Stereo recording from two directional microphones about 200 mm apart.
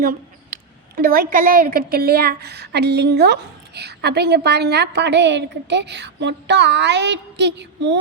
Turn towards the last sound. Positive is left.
turn(degrees=-60)  # may be behind; listen again after turning